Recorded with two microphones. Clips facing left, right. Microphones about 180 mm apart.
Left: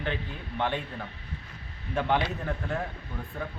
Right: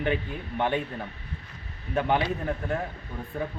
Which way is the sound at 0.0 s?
10° right (ahead or behind).